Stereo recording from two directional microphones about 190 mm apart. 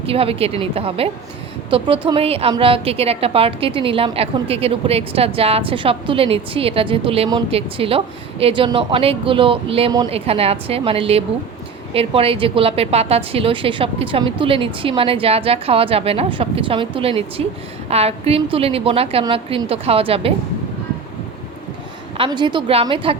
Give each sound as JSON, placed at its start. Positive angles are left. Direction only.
{"t": 0.0, "sound": "a woman's voice", "side_deg": -30}
{"t": 22.2, "sound": "a woman's voice", "side_deg": -25}